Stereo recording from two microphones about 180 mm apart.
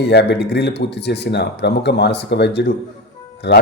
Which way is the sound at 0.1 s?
65° left (ahead or behind).